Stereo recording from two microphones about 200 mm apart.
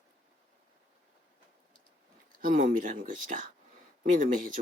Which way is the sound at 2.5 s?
40° right (ahead or behind).